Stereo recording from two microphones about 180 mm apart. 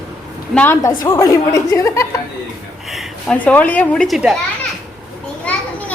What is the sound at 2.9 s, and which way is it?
Speech, centre (ahead or behind).